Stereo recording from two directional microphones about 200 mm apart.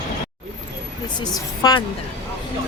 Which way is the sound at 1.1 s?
20° left (ahead or behind).